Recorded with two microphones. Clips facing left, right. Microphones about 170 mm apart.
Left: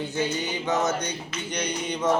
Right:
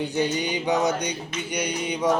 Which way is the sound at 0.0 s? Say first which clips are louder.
Right 3 dB; 15° right (ahead or behind).